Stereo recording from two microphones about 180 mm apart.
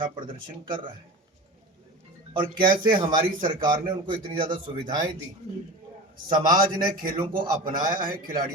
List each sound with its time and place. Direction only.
2.6 s a man's voice: 25° right (ahead or behind)
6.2 s a man's voice: 25° right (ahead or behind)
7.3 s a man's voice: 50° right (ahead or behind)